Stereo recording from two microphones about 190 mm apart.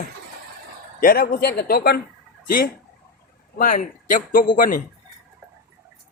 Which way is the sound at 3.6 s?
45° left (ahead or behind).